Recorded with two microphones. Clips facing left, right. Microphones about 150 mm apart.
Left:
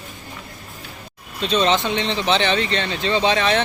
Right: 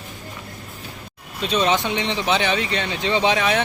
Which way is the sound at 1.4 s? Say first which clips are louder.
Left 1 dB; 10° right (ahead or behind).